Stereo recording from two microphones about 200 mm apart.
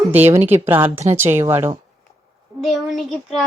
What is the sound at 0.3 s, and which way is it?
Speech, 10° right (ahead or behind).